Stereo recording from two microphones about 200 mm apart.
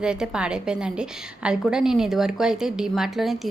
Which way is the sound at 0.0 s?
5° right (ahead or behind).